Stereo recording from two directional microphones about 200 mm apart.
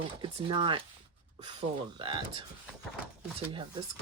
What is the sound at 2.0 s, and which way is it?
Speech, 25° right (ahead or behind).